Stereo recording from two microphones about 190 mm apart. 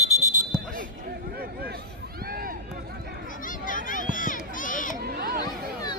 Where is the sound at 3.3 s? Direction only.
45° left (ahead or behind).